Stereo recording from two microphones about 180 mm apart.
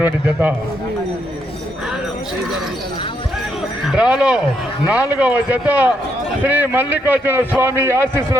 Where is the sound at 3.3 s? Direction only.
Centre (ahead or behind).